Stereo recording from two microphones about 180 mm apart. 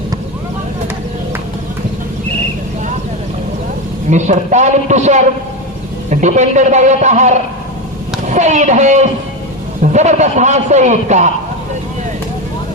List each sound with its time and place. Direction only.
4.1 s a man's voice: 40° right (ahead or behind)